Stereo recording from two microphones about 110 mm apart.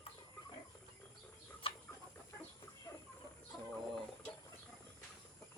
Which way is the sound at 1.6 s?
55° left (ahead or behind).